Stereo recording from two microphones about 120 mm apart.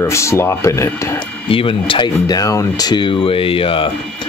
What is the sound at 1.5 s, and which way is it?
Speech, 50° left (ahead or behind).